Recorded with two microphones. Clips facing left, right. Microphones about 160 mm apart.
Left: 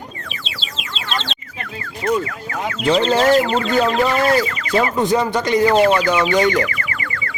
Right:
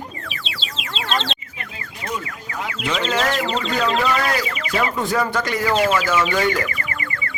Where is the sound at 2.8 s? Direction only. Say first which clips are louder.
Left 7 dB; 35° left (ahead or behind).